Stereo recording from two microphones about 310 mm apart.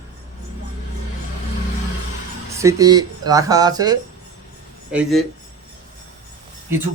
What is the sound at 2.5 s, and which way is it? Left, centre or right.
A man's voice, centre.